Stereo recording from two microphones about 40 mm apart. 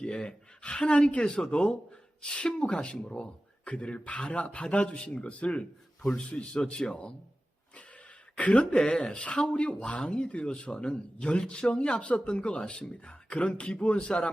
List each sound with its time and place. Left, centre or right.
0.0 s speech: left
8.4 s speech: left
8.8 s speech: left